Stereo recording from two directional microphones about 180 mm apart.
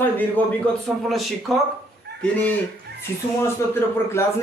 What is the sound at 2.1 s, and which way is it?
Fowl, 65° right (ahead or behind).